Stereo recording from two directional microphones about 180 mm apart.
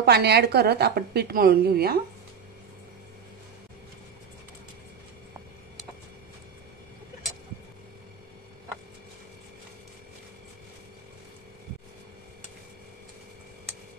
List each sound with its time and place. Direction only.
0.0 s a woman's voice: 65° right (ahead or behind)